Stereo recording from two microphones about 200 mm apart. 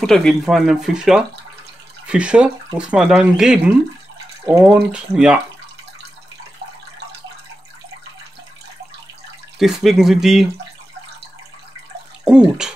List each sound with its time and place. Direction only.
0.0 s speech: centre (ahead or behind)
9.6 s speech: centre (ahead or behind)
12.3 s speech: 5° right (ahead or behind)